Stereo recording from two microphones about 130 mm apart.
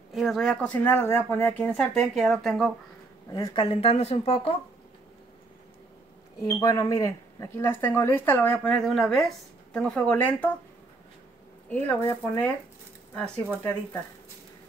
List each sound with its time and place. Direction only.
0.1 s speech: centre (ahead or behind)
2.0 s speech: centre (ahead or behind)
3.3 s a woman's voice: 25° left (ahead or behind)
3.5 s speech: 45° left (ahead or behind)
6.4 s speech: 30° left (ahead or behind); by 10.5 s 10° left (ahead or behind)
11.7 s speech: 15° left (ahead or behind)